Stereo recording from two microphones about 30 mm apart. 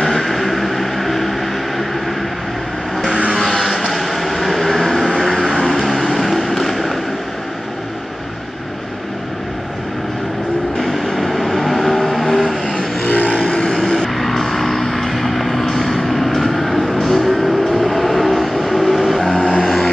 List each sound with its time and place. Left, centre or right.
0.0 s vehicle: centre
3.5 s vehicle: centre
10.8 s vehicle: centre
13.1 s vehicle: left
13.4 s vehicle: left
13.7 s vehicle: centre
15.6 s music: centre
19.3 s vehicle: left
19.6 s vehicle: centre